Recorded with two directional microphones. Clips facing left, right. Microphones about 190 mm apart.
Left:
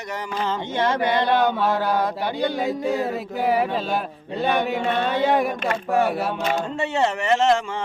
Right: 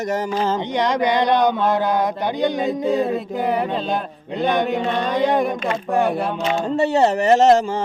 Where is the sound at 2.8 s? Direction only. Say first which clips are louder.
Right 4 dB; 20° right (ahead or behind).